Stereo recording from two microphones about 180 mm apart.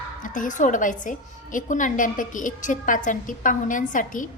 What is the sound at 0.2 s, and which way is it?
A woman's voice, 45° left (ahead or behind).